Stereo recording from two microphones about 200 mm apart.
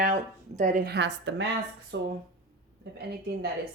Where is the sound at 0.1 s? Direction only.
40° right (ahead or behind); by 2.1 s 60° right (ahead or behind).